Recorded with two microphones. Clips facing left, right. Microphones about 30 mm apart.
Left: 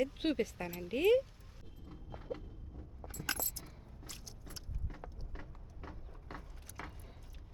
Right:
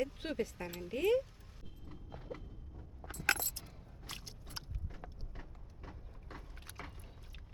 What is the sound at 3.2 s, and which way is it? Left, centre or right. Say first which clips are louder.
Keys jangling: right 6 dB; right.